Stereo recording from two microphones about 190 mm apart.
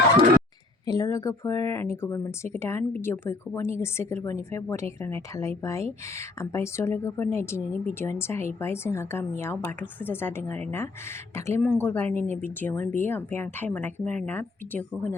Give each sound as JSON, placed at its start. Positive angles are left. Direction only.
{"t": 0.9, "sound": "speech", "side_deg": 20}
{"t": 12.1, "sound": "speech", "side_deg": -35}
{"t": 12.5, "sound": "speech", "side_deg": 10}